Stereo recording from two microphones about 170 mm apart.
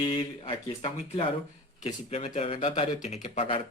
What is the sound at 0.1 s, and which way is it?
Speech, 35° left (ahead or behind).